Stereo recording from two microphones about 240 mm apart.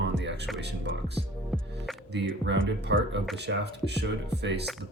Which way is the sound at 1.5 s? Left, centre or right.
Centre.